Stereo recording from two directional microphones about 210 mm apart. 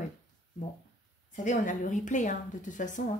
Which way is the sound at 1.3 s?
35° left (ahead or behind).